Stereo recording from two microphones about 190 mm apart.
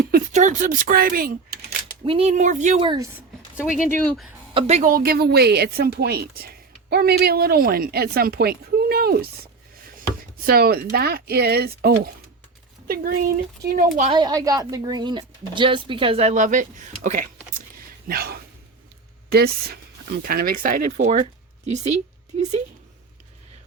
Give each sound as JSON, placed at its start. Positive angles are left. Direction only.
{"t": 0.0, "sound": "speech", "side_deg": -45}
{"t": 2.0, "sound": "speech", "side_deg": -30}
{"t": 2.8, "sound": "speech", "side_deg": -25}
{"t": 3.8, "sound": "speech", "side_deg": 10}
{"t": 4.5, "sound": "a woman's voice", "side_deg": -35}
{"t": 10.4, "sound": "a woman's voice", "side_deg": -55}
{"t": 14.1, "sound": "speech", "side_deg": -20}
{"t": 18.1, "sound": "a woman's voice", "side_deg": -55}